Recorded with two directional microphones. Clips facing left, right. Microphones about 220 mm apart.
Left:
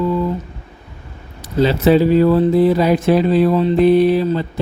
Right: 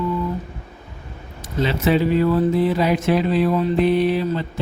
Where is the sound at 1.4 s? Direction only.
35° left (ahead or behind).